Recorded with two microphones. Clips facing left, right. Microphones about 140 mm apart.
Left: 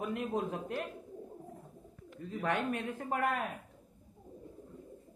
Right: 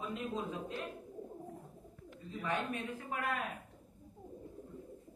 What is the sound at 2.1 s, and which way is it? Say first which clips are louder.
A man's voice: left 4 dB; 65° left (ahead or behind).